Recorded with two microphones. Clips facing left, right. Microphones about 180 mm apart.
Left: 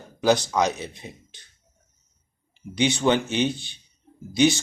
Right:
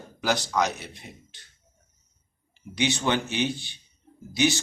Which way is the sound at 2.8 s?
15° left (ahead or behind).